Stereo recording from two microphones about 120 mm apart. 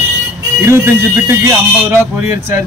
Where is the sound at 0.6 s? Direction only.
20° right (ahead or behind).